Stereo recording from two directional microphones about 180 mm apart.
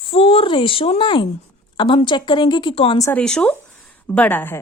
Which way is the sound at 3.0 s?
15° left (ahead or behind).